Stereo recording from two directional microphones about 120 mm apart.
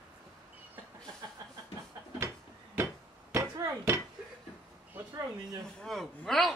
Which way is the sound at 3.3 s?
25° right (ahead or behind).